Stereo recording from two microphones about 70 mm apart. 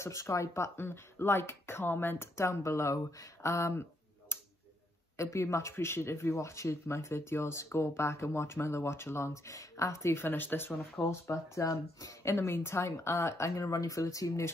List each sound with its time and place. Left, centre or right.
0.0 s speech: left
4.3 s tick-tock: left
5.1 s speech: left
11.0 s speech: left